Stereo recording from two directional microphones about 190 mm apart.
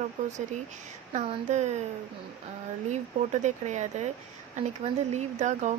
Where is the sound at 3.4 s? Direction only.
40° right (ahead or behind).